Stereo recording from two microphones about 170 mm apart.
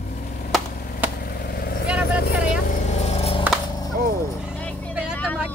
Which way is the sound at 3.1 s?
35° left (ahead or behind).